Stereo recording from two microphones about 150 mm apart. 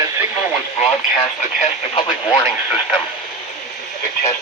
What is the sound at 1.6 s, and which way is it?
Speech, 40° left (ahead or behind).